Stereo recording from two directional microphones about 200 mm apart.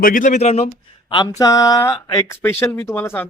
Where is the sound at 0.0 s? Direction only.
40° left (ahead or behind).